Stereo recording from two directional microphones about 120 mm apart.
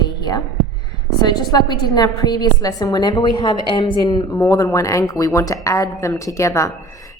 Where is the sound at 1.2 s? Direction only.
35° left (ahead or behind).